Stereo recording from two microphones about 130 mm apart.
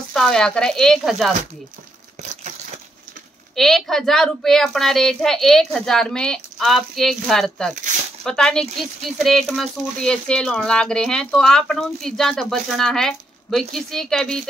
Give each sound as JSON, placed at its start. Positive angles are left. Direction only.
{"t": 0.1, "sound": "speech", "side_deg": 5}
{"t": 2.2, "sound": "a sound", "side_deg": -60}
{"t": 3.5, "sound": "speech", "side_deg": 5}